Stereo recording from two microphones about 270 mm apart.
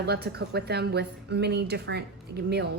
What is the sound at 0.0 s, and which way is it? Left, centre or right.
A woman's voice, right.